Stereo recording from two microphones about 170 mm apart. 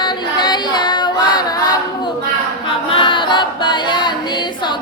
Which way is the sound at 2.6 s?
30° left (ahead or behind).